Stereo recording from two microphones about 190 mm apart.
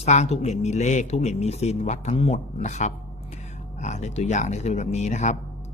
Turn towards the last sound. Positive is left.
turn(degrees=35)  # may be behind; listen again after turning